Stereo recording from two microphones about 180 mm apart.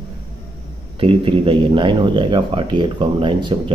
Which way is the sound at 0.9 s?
30° right (ahead or behind).